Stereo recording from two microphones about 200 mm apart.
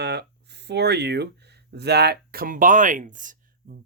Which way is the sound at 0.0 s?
55° right (ahead or behind).